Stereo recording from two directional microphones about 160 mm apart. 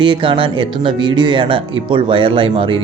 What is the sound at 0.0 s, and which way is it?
Speech, 30° right (ahead or behind).